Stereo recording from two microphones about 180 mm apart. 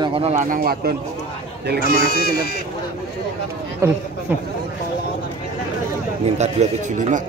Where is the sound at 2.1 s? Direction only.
60° left (ahead or behind).